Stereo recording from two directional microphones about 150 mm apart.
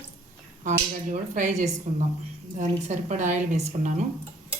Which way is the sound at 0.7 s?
55° right (ahead or behind).